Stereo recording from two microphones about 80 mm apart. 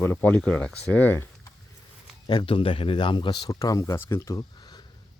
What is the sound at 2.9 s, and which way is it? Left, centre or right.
Speech, left.